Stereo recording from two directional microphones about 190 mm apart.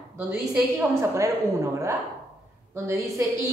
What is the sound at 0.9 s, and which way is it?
Speech, 15° right (ahead or behind).